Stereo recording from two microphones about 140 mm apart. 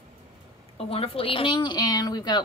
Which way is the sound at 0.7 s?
45° left (ahead or behind).